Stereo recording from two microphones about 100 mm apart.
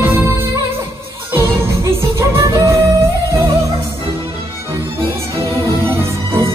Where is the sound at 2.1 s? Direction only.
35° right (ahead or behind).